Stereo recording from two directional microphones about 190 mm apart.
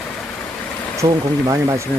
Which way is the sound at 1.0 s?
20° right (ahead or behind).